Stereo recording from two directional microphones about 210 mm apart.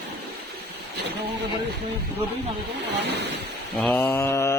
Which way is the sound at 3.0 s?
55° right (ahead or behind).